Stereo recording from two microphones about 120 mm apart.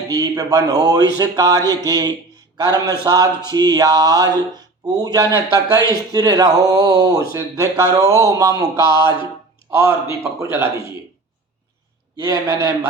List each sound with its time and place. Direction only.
0.1 s speech: 30° right (ahead or behind)
12.1 s speech: 30° right (ahead or behind)